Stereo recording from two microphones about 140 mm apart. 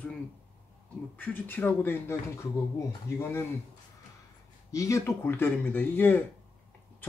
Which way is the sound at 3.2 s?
15° left (ahead or behind).